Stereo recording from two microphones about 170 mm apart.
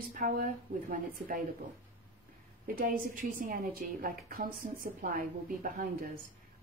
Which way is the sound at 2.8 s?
55° right (ahead or behind).